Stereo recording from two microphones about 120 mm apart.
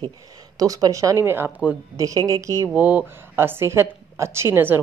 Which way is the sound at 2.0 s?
30° right (ahead or behind).